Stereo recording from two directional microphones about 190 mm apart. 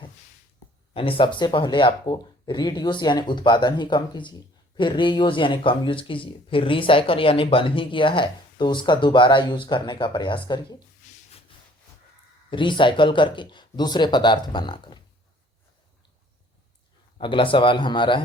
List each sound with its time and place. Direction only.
0.9 s speech: 30° left (ahead or behind)
12.5 s speech: 25° left (ahead or behind)
17.2 s speech: 25° left (ahead or behind)